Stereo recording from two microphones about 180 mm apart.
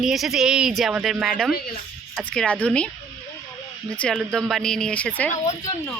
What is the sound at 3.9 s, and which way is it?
Speech, 5° left (ahead or behind).